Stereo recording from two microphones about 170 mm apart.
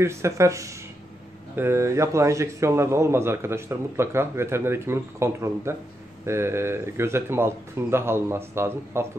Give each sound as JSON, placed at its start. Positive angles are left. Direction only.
{"t": 0.0, "sound": "a man's voice", "side_deg": -15}